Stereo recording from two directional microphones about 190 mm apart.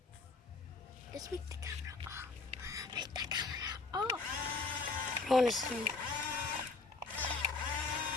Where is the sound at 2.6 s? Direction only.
20° right (ahead or behind).